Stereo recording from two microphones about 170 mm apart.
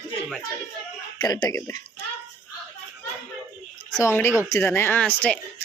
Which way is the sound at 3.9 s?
15° left (ahead or behind).